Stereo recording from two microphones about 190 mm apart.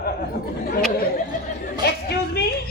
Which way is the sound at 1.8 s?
55° left (ahead or behind).